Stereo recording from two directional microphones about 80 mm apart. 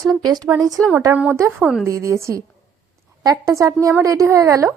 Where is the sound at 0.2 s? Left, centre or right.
Right.